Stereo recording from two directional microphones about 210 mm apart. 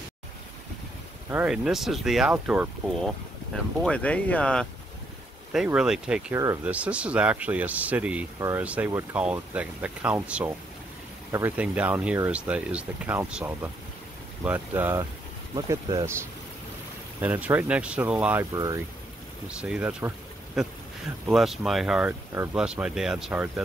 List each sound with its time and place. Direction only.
1.3 s speech: 5° right (ahead or behind)
3.5 s speech: 5° left (ahead or behind); by 16.2 s 15° right (ahead or behind)
17.2 s speech: 10° right (ahead or behind)
19.5 s speech: 5° right (ahead or behind)